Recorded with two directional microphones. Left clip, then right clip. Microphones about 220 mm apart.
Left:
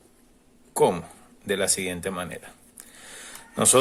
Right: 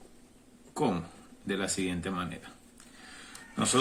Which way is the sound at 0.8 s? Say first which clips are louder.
Left 10 dB; 50° left (ahead or behind).